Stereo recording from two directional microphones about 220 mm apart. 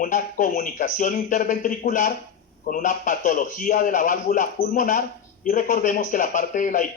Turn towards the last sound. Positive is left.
turn(degrees=35)  # may be behind; listen again after turning